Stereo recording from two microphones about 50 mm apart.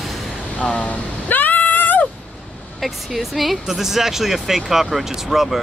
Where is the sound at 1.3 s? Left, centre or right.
Left.